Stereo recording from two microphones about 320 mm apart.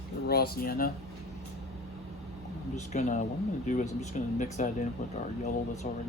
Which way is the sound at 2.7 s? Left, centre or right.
Left.